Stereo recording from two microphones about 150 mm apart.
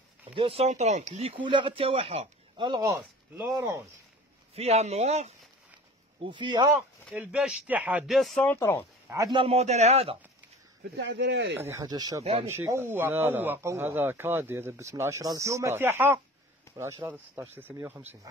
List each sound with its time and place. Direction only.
0.4 s speech: 40° right (ahead or behind); by 3.8 s 20° right (ahead or behind)
4.6 s speech: 45° right (ahead or behind)
6.1 s speech: 30° right (ahead or behind)
7.2 s speech: 5° right (ahead or behind)
8.1 s speech: centre (ahead or behind)
8.5 s speech: 20° left (ahead or behind)
9.1 s speech: 25° right (ahead or behind)
9.4 s speech: 45° right (ahead or behind)
11.5 s speech: 20° right (ahead or behind)
12.2 s speech: 50° right (ahead or behind)
12.4 s speech: 15° right (ahead or behind)